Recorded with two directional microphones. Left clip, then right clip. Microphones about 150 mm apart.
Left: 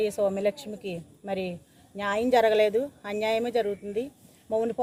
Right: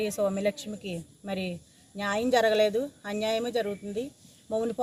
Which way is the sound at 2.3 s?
55° left (ahead or behind).